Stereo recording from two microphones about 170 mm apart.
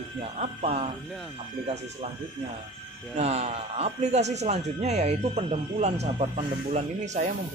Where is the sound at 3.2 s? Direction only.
40° right (ahead or behind).